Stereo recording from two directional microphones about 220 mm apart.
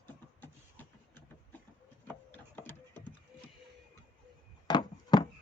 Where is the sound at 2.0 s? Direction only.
10° left (ahead or behind).